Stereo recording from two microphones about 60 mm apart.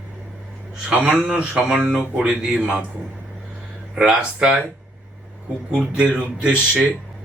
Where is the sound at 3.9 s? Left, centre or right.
Centre.